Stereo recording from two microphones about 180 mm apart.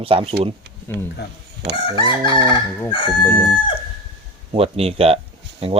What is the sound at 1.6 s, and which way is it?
Crowing, 70° right (ahead or behind).